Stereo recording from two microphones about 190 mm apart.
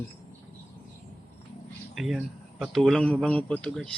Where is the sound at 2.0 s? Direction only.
5° right (ahead or behind).